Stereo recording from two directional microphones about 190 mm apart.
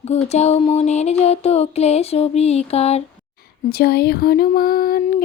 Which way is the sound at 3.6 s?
55° left (ahead or behind).